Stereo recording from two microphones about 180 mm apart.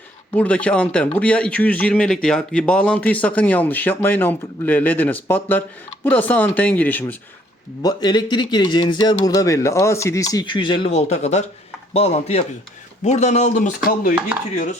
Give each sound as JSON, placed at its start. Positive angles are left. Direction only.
{"t": 0.3, "sound": "speech", "side_deg": 5}
{"t": 7.8, "sound": "speech", "side_deg": 20}